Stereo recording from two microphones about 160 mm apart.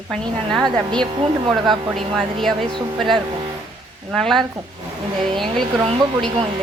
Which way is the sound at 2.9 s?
Centre (ahead or behind).